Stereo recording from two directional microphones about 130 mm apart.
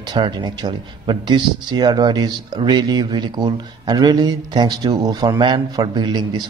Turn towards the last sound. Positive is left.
turn(degrees=-35)  # may be behind; listen again after turning